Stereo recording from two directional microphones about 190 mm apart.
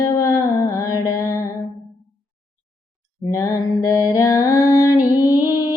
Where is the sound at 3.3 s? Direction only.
15° left (ahead or behind).